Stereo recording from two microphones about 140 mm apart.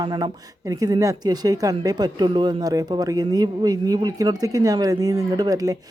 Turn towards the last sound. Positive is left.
turn(degrees=-25)  # may be behind; listen again after turning